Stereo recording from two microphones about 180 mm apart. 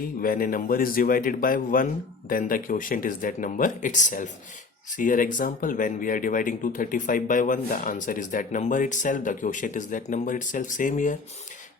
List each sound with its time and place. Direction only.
0.2 s speech: 50° left (ahead or behind)